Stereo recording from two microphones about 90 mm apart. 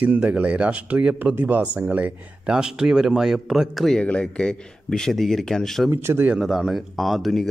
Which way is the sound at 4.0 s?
10° left (ahead or behind).